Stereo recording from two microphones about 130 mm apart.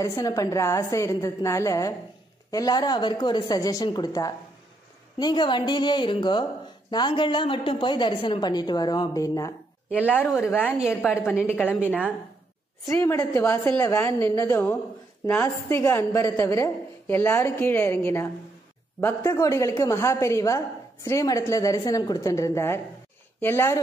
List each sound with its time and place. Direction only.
0.0 s a woman's voice: 25° left (ahead or behind)
9.9 s a woman's voice: 10° left (ahead or behind)
13.3 s a woman's voice: 25° left (ahead or behind)